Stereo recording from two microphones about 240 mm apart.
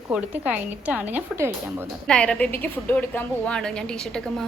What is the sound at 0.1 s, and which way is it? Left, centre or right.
Speech, centre.